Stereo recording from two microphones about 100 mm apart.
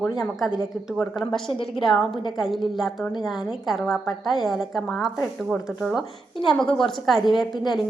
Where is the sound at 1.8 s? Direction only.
Centre (ahead or behind).